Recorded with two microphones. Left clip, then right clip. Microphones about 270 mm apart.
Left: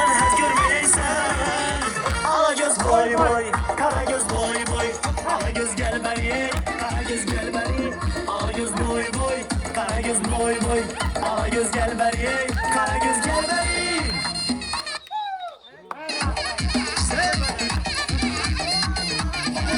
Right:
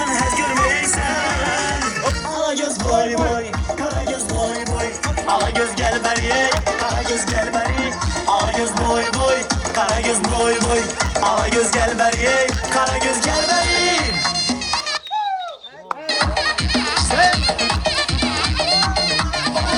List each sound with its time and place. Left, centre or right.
0.0 s music: centre
2.3 s music: left
5.3 s music: centre
5.8 s music: right
8.3 s music: right
16.7 s music: centre